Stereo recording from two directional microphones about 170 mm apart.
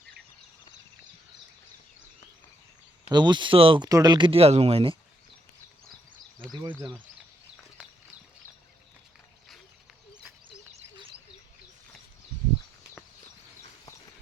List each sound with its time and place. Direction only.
3.1 s speech: 25° right (ahead or behind)
6.6 s speech: 25° right (ahead or behind)
10.7 s a sound: 35° right (ahead or behind)